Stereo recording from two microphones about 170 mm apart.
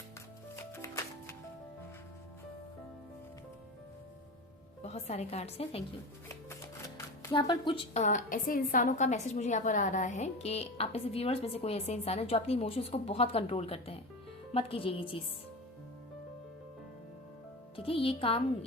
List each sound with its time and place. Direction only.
0.5 s music: 15° left (ahead or behind)
4.8 s a woman's voice: 40° left (ahead or behind)
6.2 s shuffling cards: 15° left (ahead or behind)
7.3 s a woman's voice: 30° left (ahead or behind)
8.0 s a woman's voice: 50° left (ahead or behind); by 15.2 s 30° left (ahead or behind)
17.7 s a woman's voice: 35° left (ahead or behind)